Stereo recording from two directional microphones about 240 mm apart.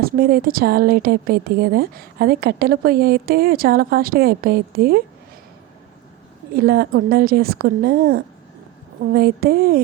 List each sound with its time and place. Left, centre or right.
0.0 s a woman's voice: right
6.6 s a woman's voice: right